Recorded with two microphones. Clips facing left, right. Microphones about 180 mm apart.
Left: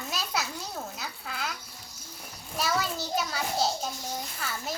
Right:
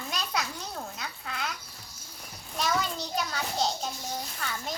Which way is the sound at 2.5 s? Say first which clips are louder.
Even; 5° left (ahead or behind).